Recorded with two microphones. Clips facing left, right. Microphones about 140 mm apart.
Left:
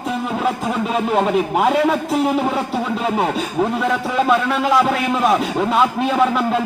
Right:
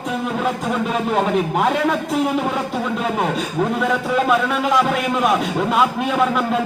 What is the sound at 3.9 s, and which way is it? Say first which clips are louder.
Speech: left 1 dB; centre (ahead or behind).